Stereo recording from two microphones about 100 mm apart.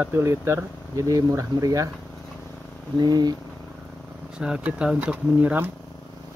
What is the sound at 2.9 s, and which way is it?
Speech, 40° right (ahead or behind).